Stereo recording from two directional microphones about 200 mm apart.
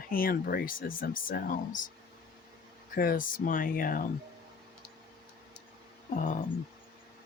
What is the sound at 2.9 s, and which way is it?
Speech, 45° left (ahead or behind).